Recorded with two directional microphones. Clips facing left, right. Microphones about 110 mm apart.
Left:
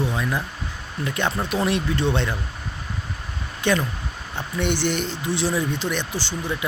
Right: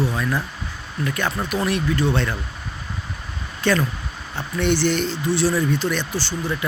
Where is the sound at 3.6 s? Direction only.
15° left (ahead or behind).